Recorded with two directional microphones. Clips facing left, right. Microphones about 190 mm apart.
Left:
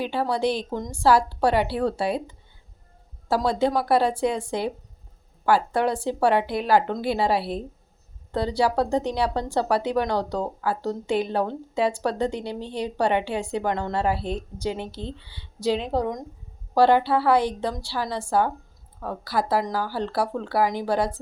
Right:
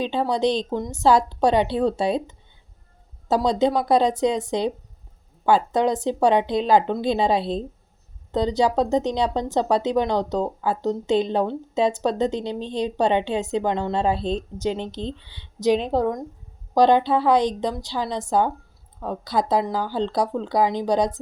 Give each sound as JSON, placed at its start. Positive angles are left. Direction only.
{"t": 0.0, "sound": "a woman's voice", "side_deg": -20}